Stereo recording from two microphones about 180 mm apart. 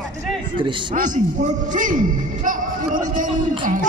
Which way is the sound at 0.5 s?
25° right (ahead or behind).